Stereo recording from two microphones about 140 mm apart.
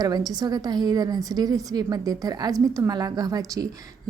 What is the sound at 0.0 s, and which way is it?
A woman's voice, 30° right (ahead or behind).